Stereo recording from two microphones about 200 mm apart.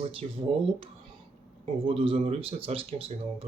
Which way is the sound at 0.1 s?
25° right (ahead or behind).